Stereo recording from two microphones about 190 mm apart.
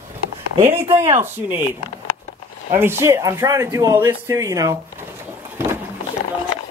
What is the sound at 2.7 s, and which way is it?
Speech, 10° right (ahead or behind).